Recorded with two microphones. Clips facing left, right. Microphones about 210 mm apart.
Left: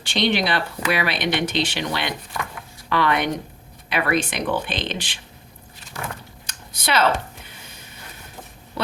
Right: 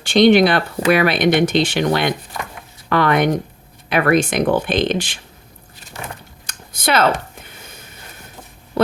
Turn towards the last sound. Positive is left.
turn(degrees=-50)  # may be behind; listen again after turning